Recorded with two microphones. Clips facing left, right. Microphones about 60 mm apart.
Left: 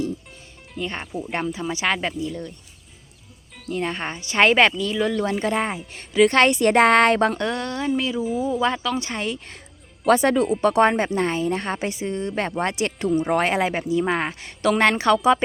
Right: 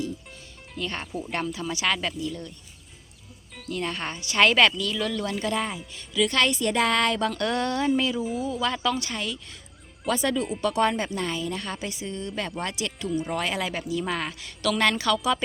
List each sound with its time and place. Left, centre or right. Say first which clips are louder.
0.8 s speech: left 3 dB; centre
3.7 s speech: left 4 dB; left
7.5 s speech: even; centre
8.4 s a woman's voice: left 5 dB; left
10.1 s a woman's voice: left 8 dB; left